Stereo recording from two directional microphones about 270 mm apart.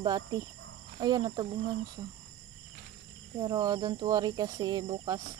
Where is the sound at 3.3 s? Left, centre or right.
Centre.